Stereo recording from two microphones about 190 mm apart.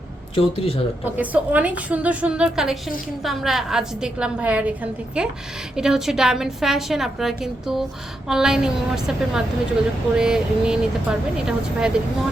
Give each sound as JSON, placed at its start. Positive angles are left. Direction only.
{"t": 0.3, "sound": "speech", "side_deg": 30}
{"t": 1.0, "sound": "a woman's voice", "side_deg": -10}